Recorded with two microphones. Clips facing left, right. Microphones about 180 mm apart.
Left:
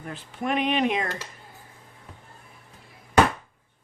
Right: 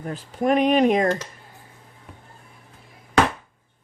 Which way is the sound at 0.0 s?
40° right (ahead or behind).